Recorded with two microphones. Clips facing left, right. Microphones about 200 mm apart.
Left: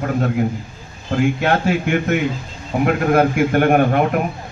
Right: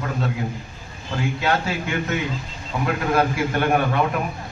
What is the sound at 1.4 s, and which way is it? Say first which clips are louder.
A man's voice: left 6 dB; 50° left (ahead or behind).